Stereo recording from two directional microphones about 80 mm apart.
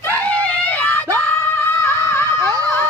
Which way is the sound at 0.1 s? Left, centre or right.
Left.